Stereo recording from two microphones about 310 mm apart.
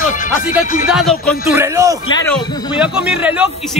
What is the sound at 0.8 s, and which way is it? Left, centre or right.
A man's voice, centre.